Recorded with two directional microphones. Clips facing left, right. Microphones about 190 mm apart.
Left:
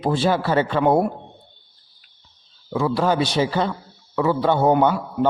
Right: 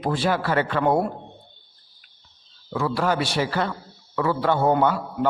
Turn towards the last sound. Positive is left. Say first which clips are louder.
# left 3 dB
turn(degrees=20)  # may be behind; listen again after turning